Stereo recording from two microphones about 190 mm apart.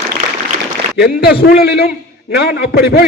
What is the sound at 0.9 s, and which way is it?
A man's voice, 55° left (ahead or behind).